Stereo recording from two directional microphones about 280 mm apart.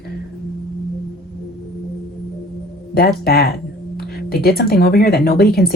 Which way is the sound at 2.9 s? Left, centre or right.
Left.